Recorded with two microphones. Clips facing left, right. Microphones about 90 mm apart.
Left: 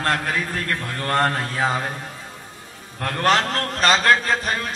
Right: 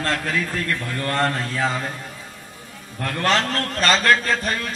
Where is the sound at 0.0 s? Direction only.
40° left (ahead or behind).